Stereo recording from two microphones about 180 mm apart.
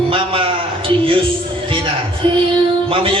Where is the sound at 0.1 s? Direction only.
30° right (ahead or behind).